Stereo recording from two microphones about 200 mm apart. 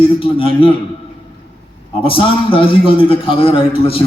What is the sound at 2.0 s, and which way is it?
A man's voice, 25° left (ahead or behind).